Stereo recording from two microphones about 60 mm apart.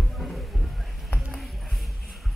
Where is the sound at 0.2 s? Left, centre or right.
Centre.